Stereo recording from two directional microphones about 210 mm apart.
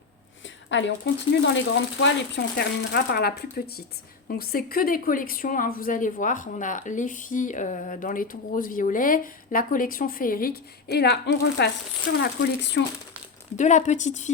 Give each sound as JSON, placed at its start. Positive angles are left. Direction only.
{"t": 0.4, "sound": "speech", "side_deg": 60}
{"t": 13.6, "sound": "speech", "side_deg": 35}